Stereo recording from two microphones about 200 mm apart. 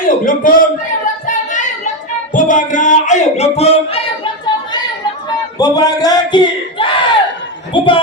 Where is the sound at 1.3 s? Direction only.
40° left (ahead or behind).